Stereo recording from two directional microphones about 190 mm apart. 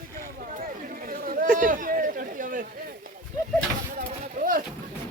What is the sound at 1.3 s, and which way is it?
Chatter, 45° right (ahead or behind).